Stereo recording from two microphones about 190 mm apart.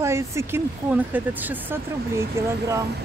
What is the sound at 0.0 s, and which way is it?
Speech, 15° right (ahead or behind).